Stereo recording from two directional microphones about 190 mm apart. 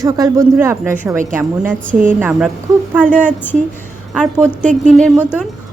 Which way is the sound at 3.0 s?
10° right (ahead or behind).